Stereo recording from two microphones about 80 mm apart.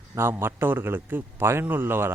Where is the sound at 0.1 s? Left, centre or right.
Right.